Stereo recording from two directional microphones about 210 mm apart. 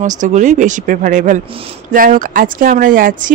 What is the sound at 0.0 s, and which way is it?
Speech, 35° right (ahead or behind).